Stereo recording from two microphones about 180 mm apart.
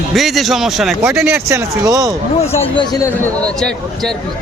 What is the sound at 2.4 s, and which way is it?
Speech, 35° left (ahead or behind).